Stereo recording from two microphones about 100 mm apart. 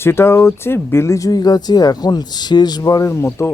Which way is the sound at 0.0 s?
25° left (ahead or behind).